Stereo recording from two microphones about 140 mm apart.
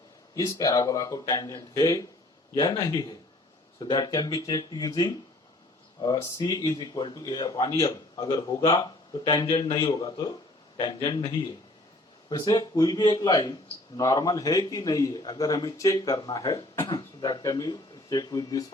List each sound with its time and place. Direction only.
0.3 s a man's voice: 25° left (ahead or behind)